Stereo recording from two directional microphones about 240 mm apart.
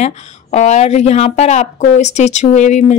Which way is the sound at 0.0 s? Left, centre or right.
Left.